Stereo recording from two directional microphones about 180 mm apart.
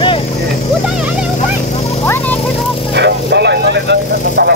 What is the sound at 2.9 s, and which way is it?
Vehicle, 70° right (ahead or behind).